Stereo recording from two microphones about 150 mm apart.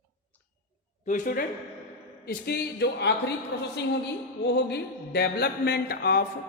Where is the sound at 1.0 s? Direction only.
60° left (ahead or behind).